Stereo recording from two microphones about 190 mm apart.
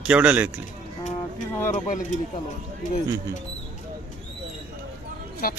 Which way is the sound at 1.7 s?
45° left (ahead or behind).